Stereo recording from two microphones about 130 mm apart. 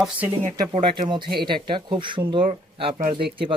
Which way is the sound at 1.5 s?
35° right (ahead or behind).